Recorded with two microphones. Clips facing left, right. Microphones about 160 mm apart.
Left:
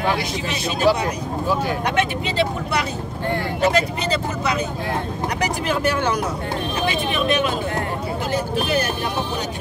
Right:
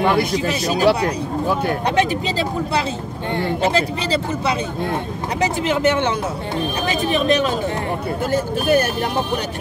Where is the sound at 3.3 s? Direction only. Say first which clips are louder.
Right 1 dB; 30° right (ahead or behind).